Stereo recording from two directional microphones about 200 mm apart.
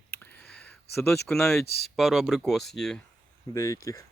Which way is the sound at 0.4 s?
5° left (ahead or behind).